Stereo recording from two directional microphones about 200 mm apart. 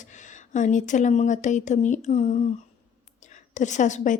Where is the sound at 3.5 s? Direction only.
40° left (ahead or behind).